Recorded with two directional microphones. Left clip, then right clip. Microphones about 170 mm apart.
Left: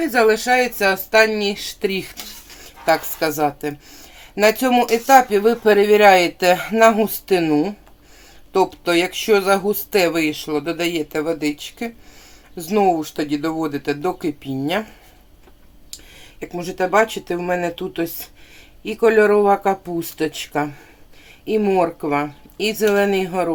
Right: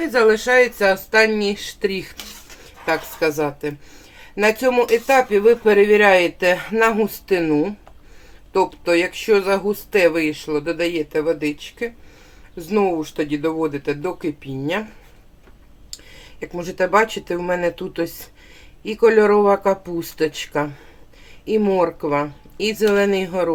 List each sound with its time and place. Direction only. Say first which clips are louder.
0.0 s a woman's voice: even; 20° left (ahead or behind)
16.4 s speech: right 1 dB; 10° left (ahead or behind)